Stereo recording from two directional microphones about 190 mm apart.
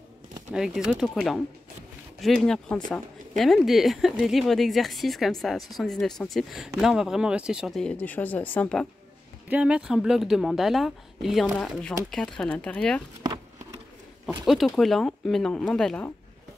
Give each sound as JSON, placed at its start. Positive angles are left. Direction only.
{"t": 0.5, "sound": "speech", "side_deg": -5}
{"t": 2.1, "sound": "speech", "side_deg": 0}
{"t": 9.5, "sound": "speech", "side_deg": -5}
{"t": 13.2, "sound": "a sound", "side_deg": -20}
{"t": 14.4, "sound": "speech", "side_deg": 0}